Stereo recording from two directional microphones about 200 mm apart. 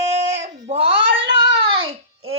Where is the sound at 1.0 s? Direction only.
65° right (ahead or behind).